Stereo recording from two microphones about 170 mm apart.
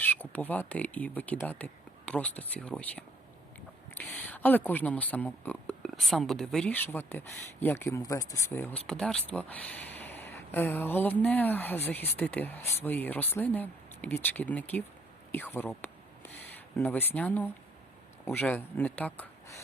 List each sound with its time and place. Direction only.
0.0 s speech: 10° left (ahead or behind)
15.3 s a sound: 10° left (ahead or behind)
16.7 s speech: 10° left (ahead or behind)